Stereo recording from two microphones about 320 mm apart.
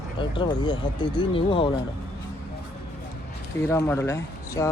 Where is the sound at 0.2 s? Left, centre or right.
Centre.